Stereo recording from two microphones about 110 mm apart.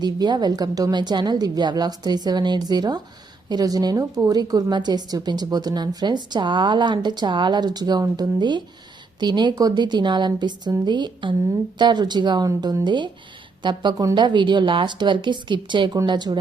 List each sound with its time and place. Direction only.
0.0 s a woman's voice: 40° right (ahead or behind)